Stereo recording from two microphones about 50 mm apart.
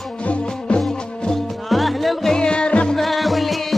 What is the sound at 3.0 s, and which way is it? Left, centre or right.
Music, centre.